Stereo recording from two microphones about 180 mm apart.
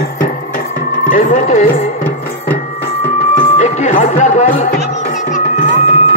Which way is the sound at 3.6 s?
40° left (ahead or behind).